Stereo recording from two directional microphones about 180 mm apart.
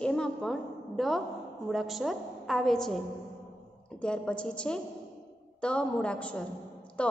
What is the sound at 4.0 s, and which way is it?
Music, 5° left (ahead or behind).